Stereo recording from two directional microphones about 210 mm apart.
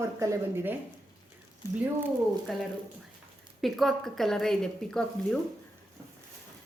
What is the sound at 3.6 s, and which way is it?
A woman's voice, centre (ahead or behind).